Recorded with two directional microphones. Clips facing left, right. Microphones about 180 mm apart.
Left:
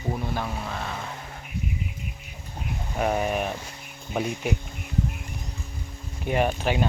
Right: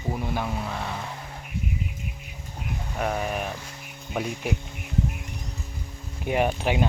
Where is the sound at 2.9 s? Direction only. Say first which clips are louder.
Left 3 dB; 10° left (ahead or behind).